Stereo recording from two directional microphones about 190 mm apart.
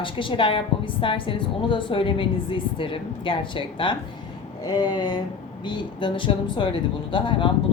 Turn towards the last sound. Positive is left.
turn(degrees=25)  # may be behind; listen again after turning